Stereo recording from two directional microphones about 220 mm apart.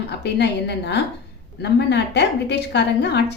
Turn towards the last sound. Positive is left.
turn(degrees=50)  # may be behind; listen again after turning